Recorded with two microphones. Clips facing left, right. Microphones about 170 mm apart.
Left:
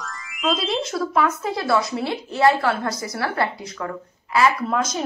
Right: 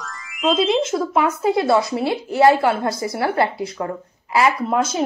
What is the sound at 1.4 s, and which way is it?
A woman's voice, 25° right (ahead or behind).